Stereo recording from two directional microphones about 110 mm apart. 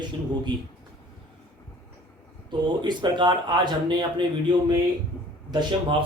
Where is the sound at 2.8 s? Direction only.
45° right (ahead or behind).